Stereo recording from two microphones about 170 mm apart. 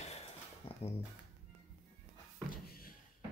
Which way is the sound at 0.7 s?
35° left (ahead or behind).